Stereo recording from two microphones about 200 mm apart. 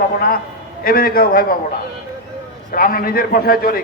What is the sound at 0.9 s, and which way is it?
Speech, 45° left (ahead or behind).